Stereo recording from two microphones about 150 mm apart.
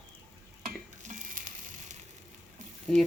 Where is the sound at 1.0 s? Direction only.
60° right (ahead or behind).